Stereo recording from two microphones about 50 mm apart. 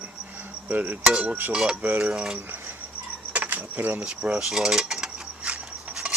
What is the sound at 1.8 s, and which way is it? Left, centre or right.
Cutlery, right.